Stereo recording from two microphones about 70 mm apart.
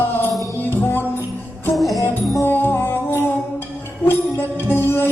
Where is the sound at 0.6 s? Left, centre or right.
Left.